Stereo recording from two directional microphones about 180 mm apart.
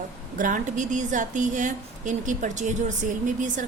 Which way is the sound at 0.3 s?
50° right (ahead or behind).